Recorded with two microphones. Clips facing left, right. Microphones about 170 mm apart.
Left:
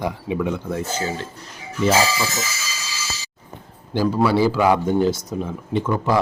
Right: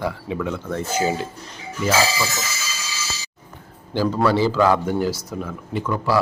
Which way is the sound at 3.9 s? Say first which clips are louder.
Left 1 dB; 15° left (ahead or behind).